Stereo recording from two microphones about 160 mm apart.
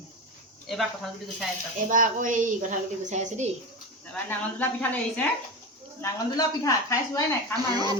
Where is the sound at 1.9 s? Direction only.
55° right (ahead or behind).